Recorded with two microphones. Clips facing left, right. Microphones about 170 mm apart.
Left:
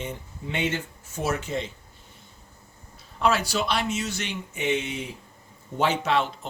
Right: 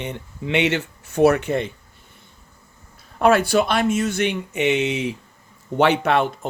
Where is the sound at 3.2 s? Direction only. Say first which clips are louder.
Right 8 dB; 55° right (ahead or behind); by 5.1 s 80° right.